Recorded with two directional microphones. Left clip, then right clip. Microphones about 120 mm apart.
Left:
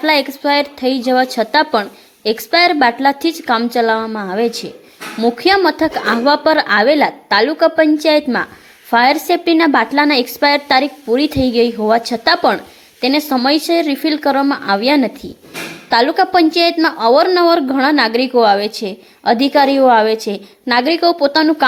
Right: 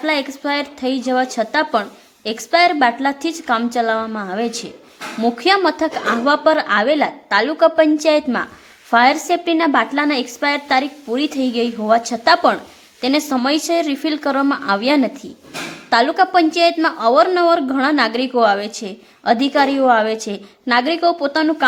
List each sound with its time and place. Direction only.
0.0 s a woman's voice: 35° left (ahead or behind)